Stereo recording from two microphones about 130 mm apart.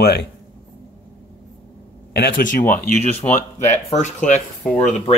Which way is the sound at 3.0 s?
60° left (ahead or behind).